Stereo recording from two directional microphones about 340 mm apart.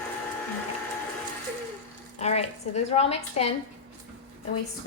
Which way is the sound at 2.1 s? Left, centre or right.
Centre.